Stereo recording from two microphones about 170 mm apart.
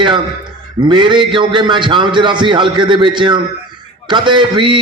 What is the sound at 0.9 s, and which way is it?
A man's voice, 30° right (ahead or behind).